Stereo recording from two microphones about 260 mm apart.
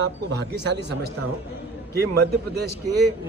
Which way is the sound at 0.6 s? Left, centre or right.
Right.